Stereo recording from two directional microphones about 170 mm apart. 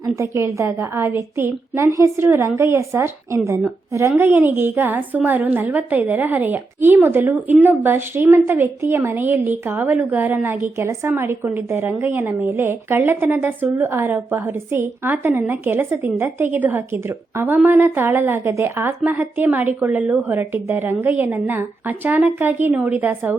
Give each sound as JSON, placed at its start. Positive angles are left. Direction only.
{"t": 0.0, "sound": "a woman's voice", "side_deg": -15}